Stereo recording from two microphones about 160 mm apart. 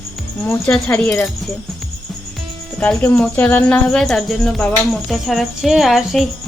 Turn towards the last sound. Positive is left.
turn(degrees=0)  # may be behind; listen again after turning